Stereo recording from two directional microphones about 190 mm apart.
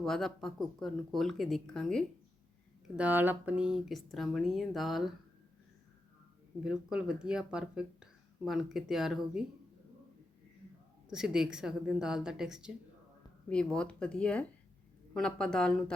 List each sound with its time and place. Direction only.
0.0 s speech: centre (ahead or behind)
2.9 s speech: 10° right (ahead or behind)
6.6 s speech: 5° right (ahead or behind)
11.1 s speech: 5° right (ahead or behind)